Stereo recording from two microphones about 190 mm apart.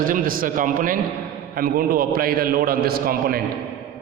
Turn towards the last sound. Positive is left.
turn(degrees=-50)  # may be behind; listen again after turning